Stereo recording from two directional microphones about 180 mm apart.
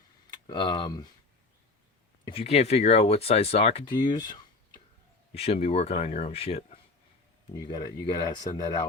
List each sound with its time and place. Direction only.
0.4 s speech: 25° left (ahead or behind)
2.2 s speech: 35° left (ahead or behind)
4.0 s a sound: 25° left (ahead or behind)
5.3 s speech: 35° left (ahead or behind)
7.5 s speech: 20° left (ahead or behind)